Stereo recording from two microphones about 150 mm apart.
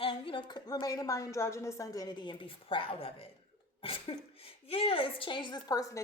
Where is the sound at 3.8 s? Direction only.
40° left (ahead or behind).